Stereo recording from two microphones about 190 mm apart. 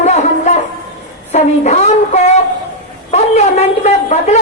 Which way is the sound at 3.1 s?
35° left (ahead or behind).